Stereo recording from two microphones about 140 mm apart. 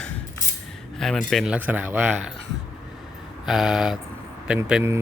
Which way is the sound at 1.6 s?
10° right (ahead or behind).